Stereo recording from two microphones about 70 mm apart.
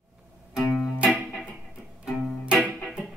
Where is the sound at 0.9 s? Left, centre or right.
Right.